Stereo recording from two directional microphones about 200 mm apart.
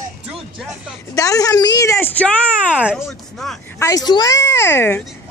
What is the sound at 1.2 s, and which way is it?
Speech, 15° left (ahead or behind).